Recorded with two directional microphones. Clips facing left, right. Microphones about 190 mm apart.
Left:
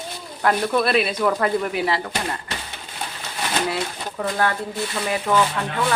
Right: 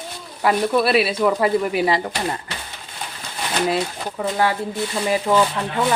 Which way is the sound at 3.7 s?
15° right (ahead or behind).